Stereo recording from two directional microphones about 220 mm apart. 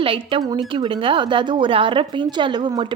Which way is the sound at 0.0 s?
25° right (ahead or behind).